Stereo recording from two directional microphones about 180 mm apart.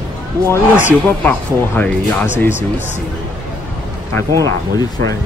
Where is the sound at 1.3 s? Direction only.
10° left (ahead or behind).